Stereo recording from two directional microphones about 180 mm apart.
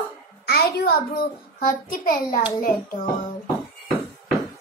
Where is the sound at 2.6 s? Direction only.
50° left (ahead or behind).